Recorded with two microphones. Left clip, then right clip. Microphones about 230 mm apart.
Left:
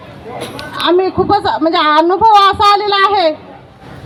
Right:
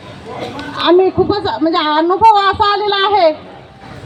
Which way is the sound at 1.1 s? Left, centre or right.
Left.